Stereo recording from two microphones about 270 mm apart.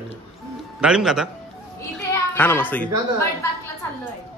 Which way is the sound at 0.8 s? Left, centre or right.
Centre.